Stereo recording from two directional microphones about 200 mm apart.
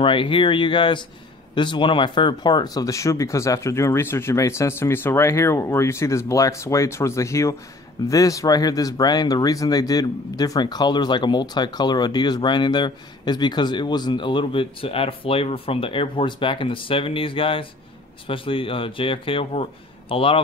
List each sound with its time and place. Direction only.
0.0 s speech: 25° left (ahead or behind)